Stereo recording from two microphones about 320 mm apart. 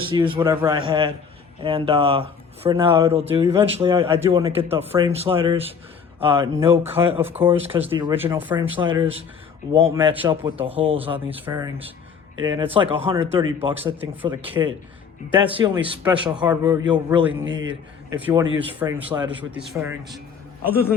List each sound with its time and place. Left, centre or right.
0.1 s speech: centre
11.3 s speech: centre
14.0 s speech: centre
17.4 s a man's voice: right
18.1 s speech: centre